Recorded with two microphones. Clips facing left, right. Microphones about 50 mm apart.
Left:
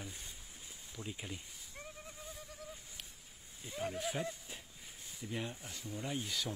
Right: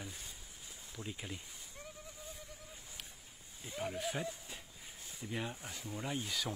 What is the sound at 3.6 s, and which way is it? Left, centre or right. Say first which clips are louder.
Speech: even; centre.